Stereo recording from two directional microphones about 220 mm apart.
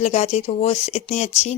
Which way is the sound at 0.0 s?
30° left (ahead or behind).